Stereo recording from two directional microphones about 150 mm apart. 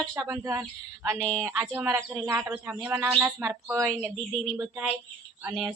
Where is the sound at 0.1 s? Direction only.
25° right (ahead or behind).